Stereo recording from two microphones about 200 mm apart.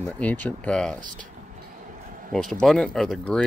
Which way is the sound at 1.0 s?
40° right (ahead or behind).